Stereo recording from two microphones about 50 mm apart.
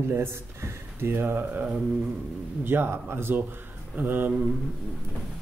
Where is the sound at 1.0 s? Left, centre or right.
Right.